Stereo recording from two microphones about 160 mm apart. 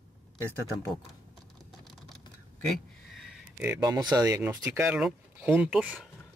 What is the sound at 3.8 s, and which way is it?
Speech, 25° right (ahead or behind).